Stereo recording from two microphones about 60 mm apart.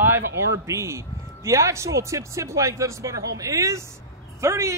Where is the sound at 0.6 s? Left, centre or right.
Right.